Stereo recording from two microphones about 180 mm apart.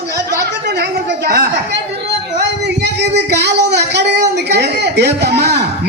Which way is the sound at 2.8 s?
70° right (ahead or behind).